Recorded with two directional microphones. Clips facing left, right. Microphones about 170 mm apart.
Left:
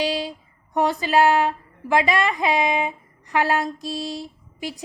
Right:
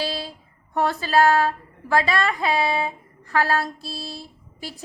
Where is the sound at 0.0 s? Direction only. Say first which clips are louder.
Left 4 dB; 15° left (ahead or behind).